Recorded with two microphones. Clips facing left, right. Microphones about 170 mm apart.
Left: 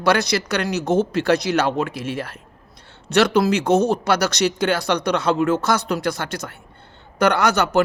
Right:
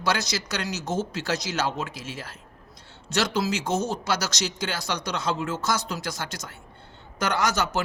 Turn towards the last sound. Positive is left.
turn(degrees=60)  # may be behind; listen again after turning